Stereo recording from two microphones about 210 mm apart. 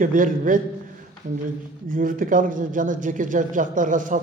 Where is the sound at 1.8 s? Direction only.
40° right (ahead or behind).